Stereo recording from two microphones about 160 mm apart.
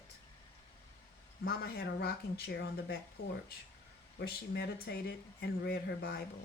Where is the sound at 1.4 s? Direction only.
75° left (ahead or behind).